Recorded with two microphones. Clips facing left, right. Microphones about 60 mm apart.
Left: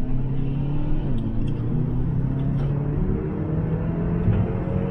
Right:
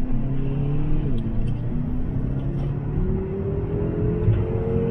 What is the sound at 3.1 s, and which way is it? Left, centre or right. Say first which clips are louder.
Music: even; centre.